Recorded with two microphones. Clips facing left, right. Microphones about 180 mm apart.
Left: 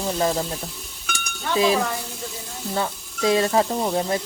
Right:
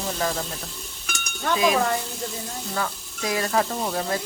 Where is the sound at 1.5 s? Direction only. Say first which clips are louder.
Left 2 dB; 30° left (ahead or behind).